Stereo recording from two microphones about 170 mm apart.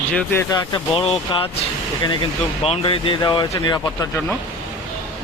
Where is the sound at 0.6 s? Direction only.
30° left (ahead or behind).